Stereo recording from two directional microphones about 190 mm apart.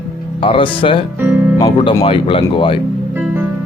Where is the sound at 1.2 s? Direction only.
10° right (ahead or behind).